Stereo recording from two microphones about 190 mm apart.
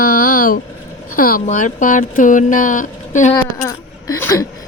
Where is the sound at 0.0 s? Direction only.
50° left (ahead or behind).